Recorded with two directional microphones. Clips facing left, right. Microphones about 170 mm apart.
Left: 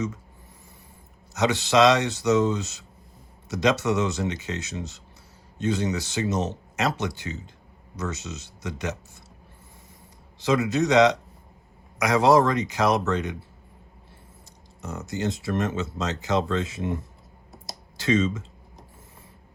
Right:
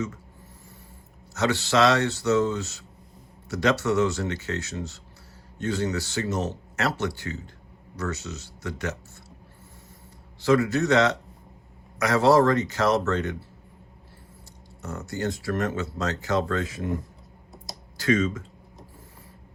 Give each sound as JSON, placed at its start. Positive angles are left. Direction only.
{"t": 1.3, "sound": "speech", "side_deg": 20}
{"t": 10.4, "sound": "speech", "side_deg": 20}
{"t": 14.8, "sound": "speech", "side_deg": 20}
{"t": 17.9, "sound": "speech", "side_deg": 25}